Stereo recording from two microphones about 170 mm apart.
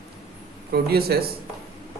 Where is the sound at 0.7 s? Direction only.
65° right (ahead or behind).